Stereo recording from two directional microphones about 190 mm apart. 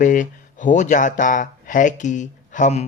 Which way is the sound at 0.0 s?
45° left (ahead or behind).